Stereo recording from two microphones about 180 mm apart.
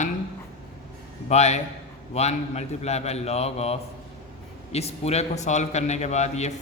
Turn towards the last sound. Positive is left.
turn(degrees=40)  # may be behind; listen again after turning